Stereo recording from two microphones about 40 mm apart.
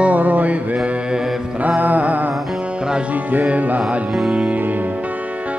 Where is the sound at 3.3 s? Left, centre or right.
Right.